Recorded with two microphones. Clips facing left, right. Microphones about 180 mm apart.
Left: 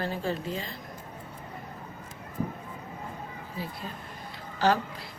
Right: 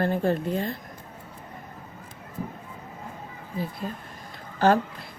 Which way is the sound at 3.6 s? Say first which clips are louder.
Right 6 dB; 50° right (ahead or behind).